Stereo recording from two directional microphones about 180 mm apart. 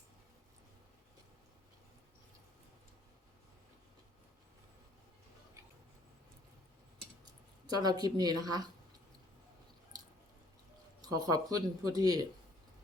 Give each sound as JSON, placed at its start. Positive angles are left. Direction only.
{"t": 7.7, "sound": "speech", "side_deg": -20}
{"t": 11.0, "sound": "speech", "side_deg": -20}